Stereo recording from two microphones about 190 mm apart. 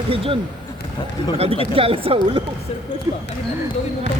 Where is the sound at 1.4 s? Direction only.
30° right (ahead or behind).